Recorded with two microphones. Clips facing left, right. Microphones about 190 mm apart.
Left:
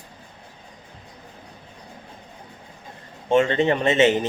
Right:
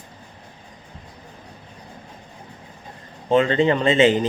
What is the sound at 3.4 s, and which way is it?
Speech, 20° left (ahead or behind).